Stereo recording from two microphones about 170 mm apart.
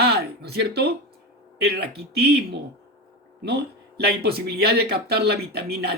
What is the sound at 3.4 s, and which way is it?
Speech, 70° right (ahead or behind).